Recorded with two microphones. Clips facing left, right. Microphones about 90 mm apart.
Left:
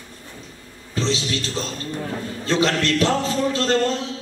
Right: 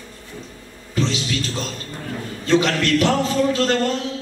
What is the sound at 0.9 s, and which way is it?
Music, 30° left (ahead or behind).